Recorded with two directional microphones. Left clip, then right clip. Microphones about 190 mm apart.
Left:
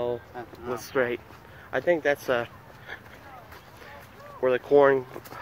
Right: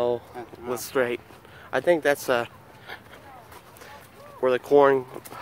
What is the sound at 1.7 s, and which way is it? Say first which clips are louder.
Speech: right 3 dB; 25° right (ahead or behind).